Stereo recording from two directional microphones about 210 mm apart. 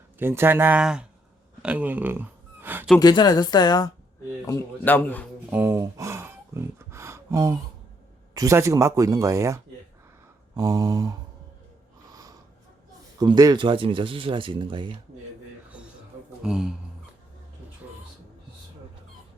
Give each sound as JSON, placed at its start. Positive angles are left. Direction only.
{"t": 0.2, "sound": "speech", "side_deg": -10}
{"t": 1.6, "sound": "a sound", "side_deg": -5}
{"t": 3.0, "sound": "a woman's voice", "side_deg": 20}
{"t": 4.4, "sound": "a man's voice", "side_deg": 10}
{"t": 5.5, "sound": "a sound", "side_deg": -10}
{"t": 8.3, "sound": "speech", "side_deg": -15}
{"t": 13.1, "sound": "speech", "side_deg": -20}
{"t": 16.4, "sound": "speech", "side_deg": 0}